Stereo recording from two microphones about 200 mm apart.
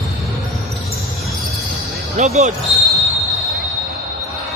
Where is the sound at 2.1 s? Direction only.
35° right (ahead or behind).